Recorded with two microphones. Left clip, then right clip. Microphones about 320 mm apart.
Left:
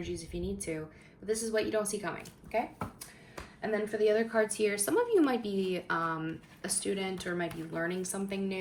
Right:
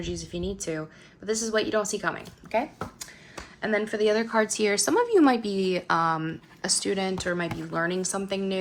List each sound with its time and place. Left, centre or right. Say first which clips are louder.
0.0 s a woman's voice: right 5 dB; right
3.6 s a woman's voice: right 5 dB; right